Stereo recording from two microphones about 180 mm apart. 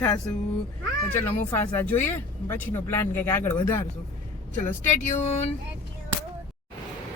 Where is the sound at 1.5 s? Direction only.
10° left (ahead or behind).